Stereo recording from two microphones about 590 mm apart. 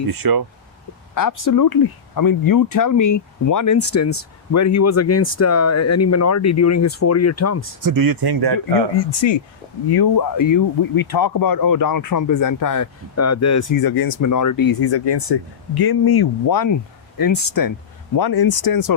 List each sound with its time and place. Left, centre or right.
0.1 s speech: right
1.1 s speech: left
7.8 s speech: right
9.0 s speech: left